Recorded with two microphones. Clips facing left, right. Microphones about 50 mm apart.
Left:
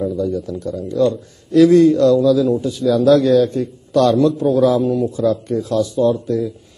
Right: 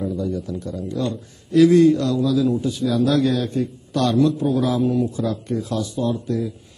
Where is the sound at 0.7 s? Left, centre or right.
Right.